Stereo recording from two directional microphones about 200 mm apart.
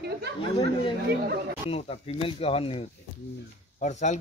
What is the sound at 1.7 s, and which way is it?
A child's voice, 30° left (ahead or behind).